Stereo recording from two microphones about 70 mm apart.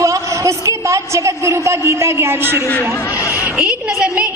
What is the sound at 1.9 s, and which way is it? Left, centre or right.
Speech, right.